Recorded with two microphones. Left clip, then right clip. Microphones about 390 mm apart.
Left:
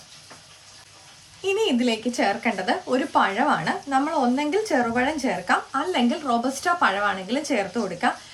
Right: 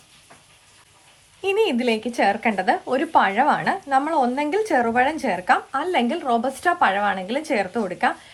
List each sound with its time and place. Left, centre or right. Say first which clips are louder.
1.5 s speech: right 3 dB; centre